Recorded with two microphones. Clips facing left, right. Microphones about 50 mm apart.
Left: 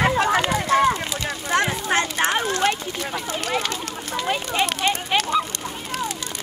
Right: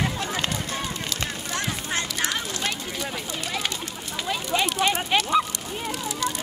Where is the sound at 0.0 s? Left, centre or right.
Left.